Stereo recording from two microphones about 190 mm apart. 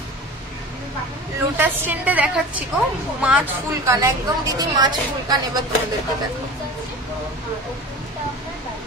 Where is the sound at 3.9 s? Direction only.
15° right (ahead or behind).